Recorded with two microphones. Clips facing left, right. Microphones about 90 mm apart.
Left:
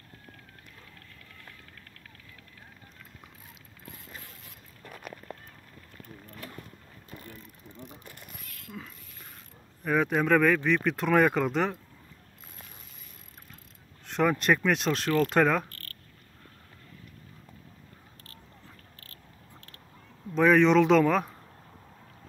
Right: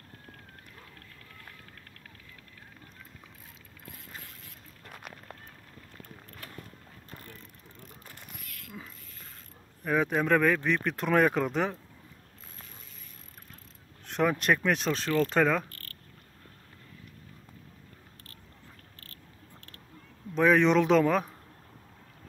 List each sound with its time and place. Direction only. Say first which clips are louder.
8.5 s mechanisms: left 1 dB; 25° left (ahead or behind)
9.8 s speech: left 1 dB; centre (ahead or behind)
14.0 s speech: left 1 dB; centre (ahead or behind)
15.7 s a sound: left 1 dB; 20° right (ahead or behind)
20.3 s speech: left 2 dB; centre (ahead or behind)